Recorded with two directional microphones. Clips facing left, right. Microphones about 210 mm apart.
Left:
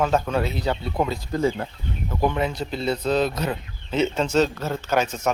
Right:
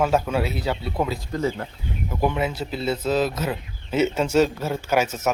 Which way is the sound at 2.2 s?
5° right (ahead or behind).